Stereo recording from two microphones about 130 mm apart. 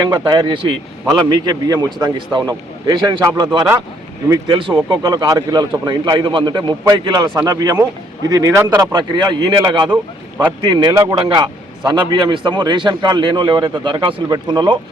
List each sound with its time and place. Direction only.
0.0 s a man's voice: 35° right (ahead or behind)
4.5 s a man's voice: 35° right (ahead or behind)